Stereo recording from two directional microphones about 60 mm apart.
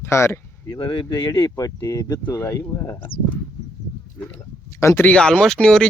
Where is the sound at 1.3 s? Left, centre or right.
Left.